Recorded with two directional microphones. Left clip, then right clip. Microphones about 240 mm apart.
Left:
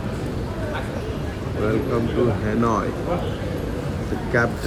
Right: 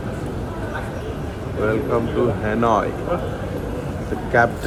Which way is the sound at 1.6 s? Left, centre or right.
Centre.